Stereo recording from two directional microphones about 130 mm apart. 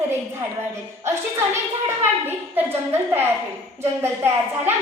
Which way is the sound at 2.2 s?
15° right (ahead or behind).